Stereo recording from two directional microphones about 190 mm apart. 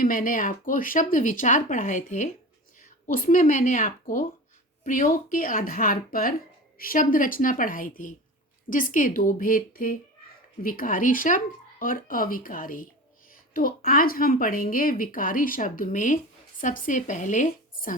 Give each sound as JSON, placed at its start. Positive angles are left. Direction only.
{"t": 0.0, "sound": "speech", "side_deg": 45}